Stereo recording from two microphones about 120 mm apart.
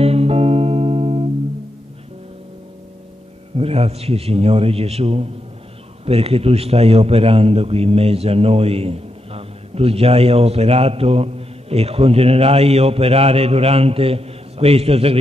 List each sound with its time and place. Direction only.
0.0 s music: 55° right (ahead or behind)
3.5 s a man's voice: 55° right (ahead or behind)